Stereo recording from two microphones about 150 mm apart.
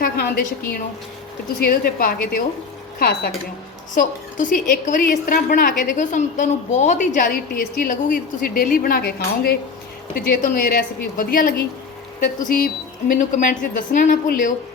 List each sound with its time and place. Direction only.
0.0 s a woman's voice: 90° left
3.0 s a woman's voice: 90° left
3.9 s a woman's voice: 60° left (ahead or behind)
7.3 s a woman's voice: 75° left (ahead or behind)
12.5 s a woman's voice: 65° left (ahead or behind)